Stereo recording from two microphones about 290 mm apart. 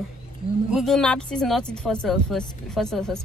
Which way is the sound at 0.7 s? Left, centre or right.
Centre.